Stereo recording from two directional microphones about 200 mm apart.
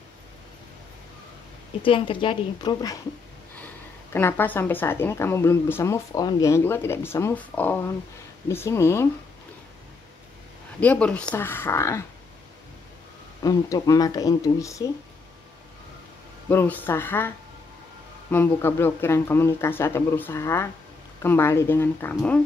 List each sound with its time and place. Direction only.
1.8 s a woman's voice: 25° left (ahead or behind)
10.8 s a woman's voice: 5° left (ahead or behind)
13.4 s a woman's voice: 20° left (ahead or behind)
16.4 s a woman's voice: 10° left (ahead or behind)
18.3 s a woman's voice: 10° left (ahead or behind)